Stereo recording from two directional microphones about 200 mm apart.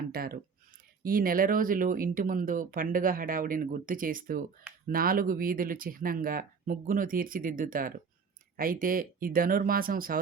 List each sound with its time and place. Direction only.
0.1 s speech: 50° right (ahead or behind)